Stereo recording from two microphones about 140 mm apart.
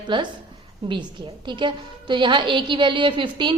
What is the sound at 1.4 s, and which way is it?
A woman's voice, 35° right (ahead or behind).